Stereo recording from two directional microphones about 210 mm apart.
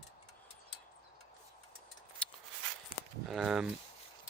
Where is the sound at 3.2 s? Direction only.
Centre (ahead or behind).